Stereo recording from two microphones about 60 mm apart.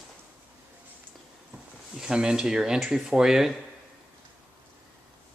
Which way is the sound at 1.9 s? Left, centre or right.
Centre.